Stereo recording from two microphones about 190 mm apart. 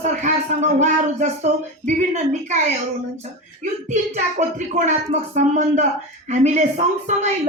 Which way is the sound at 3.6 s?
35° right (ahead or behind).